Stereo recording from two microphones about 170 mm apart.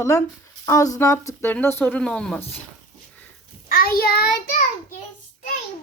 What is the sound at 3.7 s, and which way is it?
Child singing, 60° left (ahead or behind).